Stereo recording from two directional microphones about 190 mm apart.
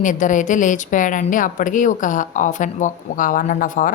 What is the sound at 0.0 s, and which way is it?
A woman's voice, 40° left (ahead or behind).